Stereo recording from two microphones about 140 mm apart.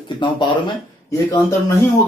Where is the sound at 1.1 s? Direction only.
20° left (ahead or behind).